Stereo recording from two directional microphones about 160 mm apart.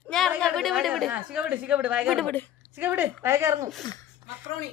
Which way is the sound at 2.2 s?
10° left (ahead or behind).